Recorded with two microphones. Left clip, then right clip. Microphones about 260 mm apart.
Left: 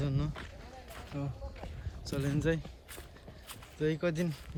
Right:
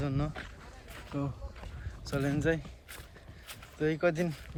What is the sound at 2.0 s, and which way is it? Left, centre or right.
Speech, centre.